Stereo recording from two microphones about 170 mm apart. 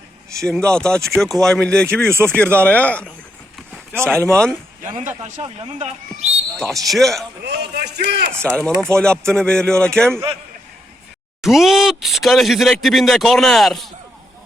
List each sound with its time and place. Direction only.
0.3 s speech: 5° left (ahead or behind)
4.0 s speech: 15° right (ahead or behind)
4.9 s speech: 40° right (ahead or behind)
6.7 s speech: centre (ahead or behind)
7.4 s a man's voice: 85° right
8.4 s speech: 5° left (ahead or behind)
11.4 s speech: centre (ahead or behind)